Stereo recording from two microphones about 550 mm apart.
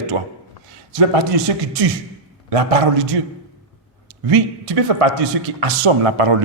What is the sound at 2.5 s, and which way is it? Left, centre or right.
Speech, right.